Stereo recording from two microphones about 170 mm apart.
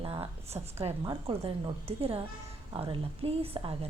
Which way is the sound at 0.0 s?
35° right (ahead or behind).